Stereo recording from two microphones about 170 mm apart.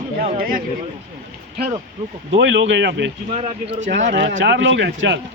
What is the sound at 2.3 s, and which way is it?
Speech, 90° right.